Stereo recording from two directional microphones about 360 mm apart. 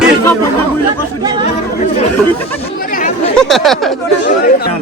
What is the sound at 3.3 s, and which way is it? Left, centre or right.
Speech, centre.